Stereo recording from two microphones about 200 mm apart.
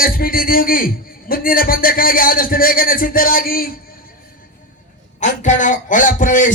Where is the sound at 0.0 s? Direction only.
45° left (ahead or behind).